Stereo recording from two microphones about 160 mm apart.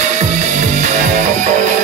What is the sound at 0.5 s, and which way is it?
Music, 45° right (ahead or behind).